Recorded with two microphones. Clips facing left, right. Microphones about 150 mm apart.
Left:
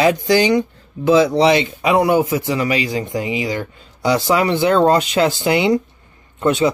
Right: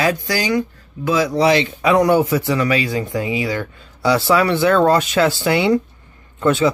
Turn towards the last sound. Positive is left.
turn(degrees=15)  # may be behind; listen again after turning